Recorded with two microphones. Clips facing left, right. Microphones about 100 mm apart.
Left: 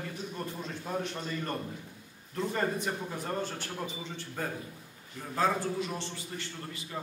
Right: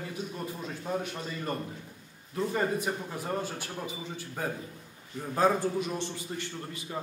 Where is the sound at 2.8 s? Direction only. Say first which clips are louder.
Right 1 dB; 10° right (ahead or behind).